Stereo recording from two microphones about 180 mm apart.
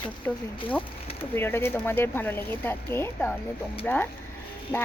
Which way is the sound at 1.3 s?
10° left (ahead or behind).